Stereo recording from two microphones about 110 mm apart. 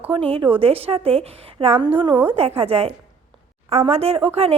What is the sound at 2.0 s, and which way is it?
Speech, 45° right (ahead or behind).